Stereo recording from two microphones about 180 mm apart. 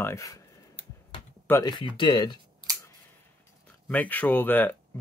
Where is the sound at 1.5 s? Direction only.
10° left (ahead or behind).